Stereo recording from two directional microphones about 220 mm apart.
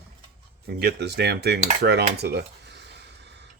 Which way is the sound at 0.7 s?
45° right (ahead or behind).